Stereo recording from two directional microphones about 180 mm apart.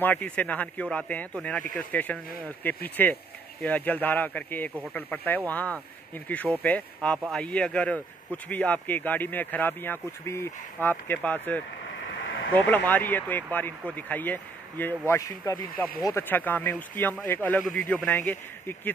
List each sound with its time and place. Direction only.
0.0 s speech: 10° left (ahead or behind)
12.2 s a sound: 90° left
12.6 s speech: 10° left (ahead or behind)